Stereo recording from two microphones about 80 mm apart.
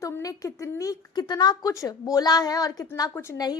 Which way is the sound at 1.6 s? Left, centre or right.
Left.